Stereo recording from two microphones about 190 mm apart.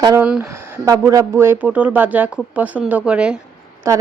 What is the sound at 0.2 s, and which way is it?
Speech, 5° right (ahead or behind).